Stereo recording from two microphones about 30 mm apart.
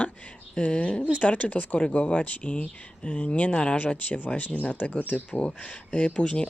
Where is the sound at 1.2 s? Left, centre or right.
Left.